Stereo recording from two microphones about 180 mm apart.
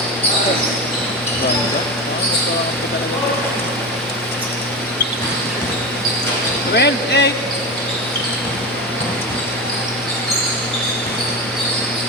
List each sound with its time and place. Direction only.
6.7 s speech: 70° left (ahead or behind)